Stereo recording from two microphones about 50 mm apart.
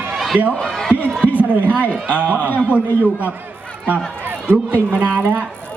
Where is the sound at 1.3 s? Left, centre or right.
Right.